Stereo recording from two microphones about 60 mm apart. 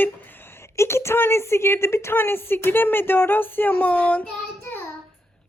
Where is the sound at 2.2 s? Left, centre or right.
Left; by 4.3 s centre.